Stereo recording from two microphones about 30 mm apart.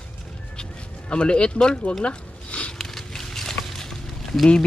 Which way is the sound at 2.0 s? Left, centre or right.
Left.